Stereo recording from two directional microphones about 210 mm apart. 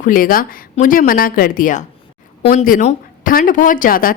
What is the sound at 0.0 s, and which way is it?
Speech, 40° left (ahead or behind).